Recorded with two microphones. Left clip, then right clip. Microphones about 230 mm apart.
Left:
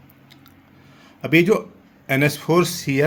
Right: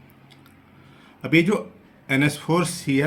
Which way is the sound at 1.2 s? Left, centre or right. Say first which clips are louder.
Left 3 dB; left.